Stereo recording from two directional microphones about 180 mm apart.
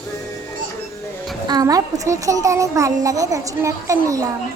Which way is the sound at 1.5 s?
20° right (ahead or behind).